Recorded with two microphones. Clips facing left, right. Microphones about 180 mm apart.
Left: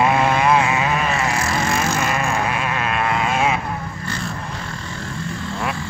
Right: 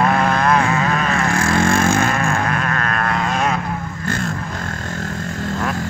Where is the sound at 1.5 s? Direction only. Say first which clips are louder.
Right 5 dB; 55° right (ahead or behind).